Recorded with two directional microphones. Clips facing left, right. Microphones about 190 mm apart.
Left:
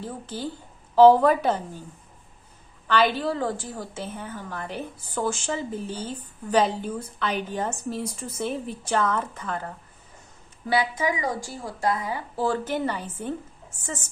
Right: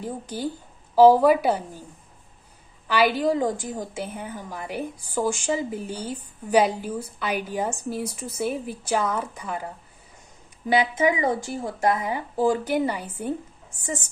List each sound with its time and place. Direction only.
0.0 s a woman's voice: 15° right (ahead or behind)
2.8 s a woman's voice: 10° right (ahead or behind)